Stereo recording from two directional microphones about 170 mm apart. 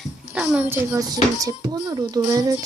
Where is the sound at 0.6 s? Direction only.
20° right (ahead or behind).